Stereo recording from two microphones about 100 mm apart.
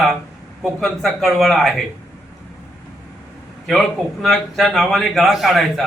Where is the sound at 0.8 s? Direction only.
5° left (ahead or behind).